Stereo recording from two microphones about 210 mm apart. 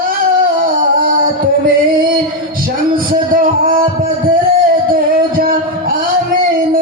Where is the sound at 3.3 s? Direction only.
40° right (ahead or behind).